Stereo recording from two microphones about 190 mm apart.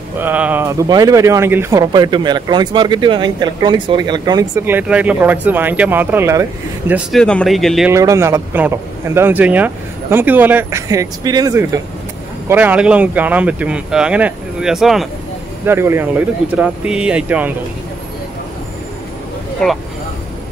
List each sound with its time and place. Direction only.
0.2 s speech: 10° right (ahead or behind)
4.6 s a man's voice: 10° right (ahead or behind)
6.9 s speech: centre (ahead or behind)
7.9 s a man's voice: 15° right (ahead or behind)
12.4 s a man's voice: 10° right (ahead or behind)
15.6 s a man's voice: 10° right (ahead or behind)